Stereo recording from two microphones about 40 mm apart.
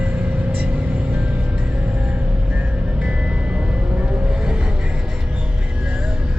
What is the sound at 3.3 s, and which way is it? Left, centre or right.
Music, right.